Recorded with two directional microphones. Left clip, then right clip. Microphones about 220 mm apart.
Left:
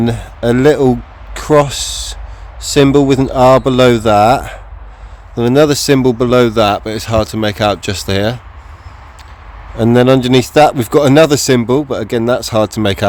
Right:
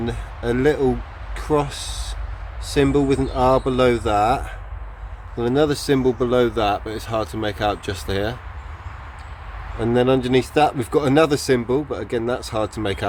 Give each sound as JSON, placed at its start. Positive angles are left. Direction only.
{"t": 0.0, "sound": "speech", "side_deg": 50}
{"t": 9.7, "sound": "speech", "side_deg": 50}